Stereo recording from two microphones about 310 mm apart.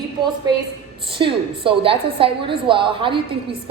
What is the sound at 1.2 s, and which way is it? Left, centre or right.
A woman's voice, centre.